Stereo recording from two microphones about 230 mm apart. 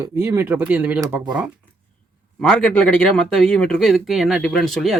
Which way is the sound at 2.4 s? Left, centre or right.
Centre.